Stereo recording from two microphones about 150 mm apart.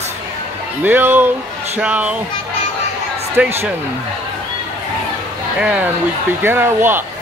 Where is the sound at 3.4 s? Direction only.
10° right (ahead or behind).